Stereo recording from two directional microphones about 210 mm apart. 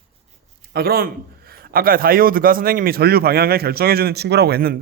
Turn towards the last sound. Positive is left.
turn(degrees=-50)  # may be behind; listen again after turning